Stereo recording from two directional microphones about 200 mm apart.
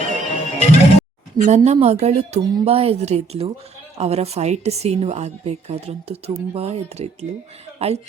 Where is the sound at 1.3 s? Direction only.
35° right (ahead or behind).